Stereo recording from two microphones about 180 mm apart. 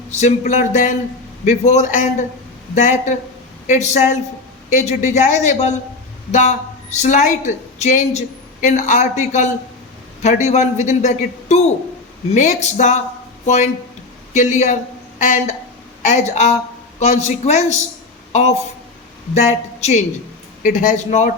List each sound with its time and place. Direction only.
0.1 s a man's voice: 40° left (ahead or behind)